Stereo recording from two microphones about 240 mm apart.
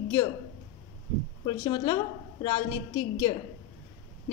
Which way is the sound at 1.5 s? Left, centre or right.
Centre.